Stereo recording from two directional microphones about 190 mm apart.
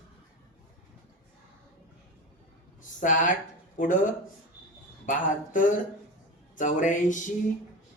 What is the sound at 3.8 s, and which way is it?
Speech, 45° left (ahead or behind).